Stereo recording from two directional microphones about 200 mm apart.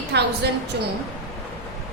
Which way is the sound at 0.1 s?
60° right (ahead or behind).